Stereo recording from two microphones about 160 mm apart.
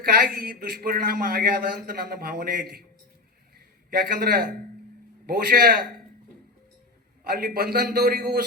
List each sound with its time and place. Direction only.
0.0 s speech: 70° right (ahead or behind)
3.8 s a man's voice: 70° right (ahead or behind)
7.3 s speech: 70° right (ahead or behind)